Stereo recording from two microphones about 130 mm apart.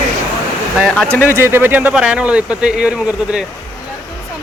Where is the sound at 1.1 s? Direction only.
15° left (ahead or behind).